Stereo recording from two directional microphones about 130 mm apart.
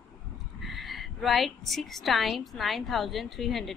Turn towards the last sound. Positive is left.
turn(degrees=0)  # may be behind; listen again after turning